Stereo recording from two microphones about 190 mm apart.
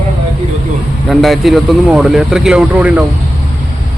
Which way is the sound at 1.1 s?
Centre (ahead or behind).